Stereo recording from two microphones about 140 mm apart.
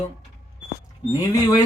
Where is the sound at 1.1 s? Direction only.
25° left (ahead or behind).